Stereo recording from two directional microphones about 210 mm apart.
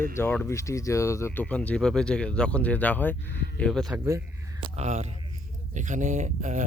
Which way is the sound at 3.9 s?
10° right (ahead or behind).